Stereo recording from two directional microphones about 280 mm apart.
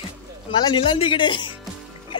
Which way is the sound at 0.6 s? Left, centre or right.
Centre.